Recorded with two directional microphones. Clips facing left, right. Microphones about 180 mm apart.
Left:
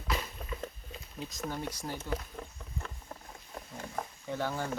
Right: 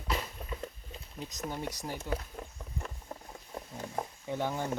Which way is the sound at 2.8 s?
20° right (ahead or behind).